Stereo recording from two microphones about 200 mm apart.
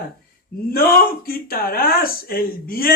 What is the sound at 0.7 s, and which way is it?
Speech, 50° left (ahead or behind).